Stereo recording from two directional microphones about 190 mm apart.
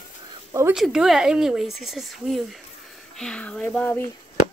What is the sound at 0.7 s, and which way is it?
Speech, centre (ahead or behind).